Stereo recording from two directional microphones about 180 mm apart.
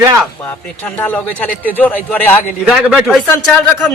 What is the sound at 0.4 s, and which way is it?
A man's voice, 10° left (ahead or behind).